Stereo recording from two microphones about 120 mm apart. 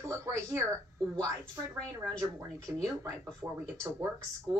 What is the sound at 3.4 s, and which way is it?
Speech, 30° right (ahead or behind).